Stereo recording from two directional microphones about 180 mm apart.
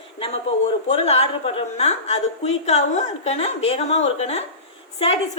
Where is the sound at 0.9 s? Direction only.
35° left (ahead or behind).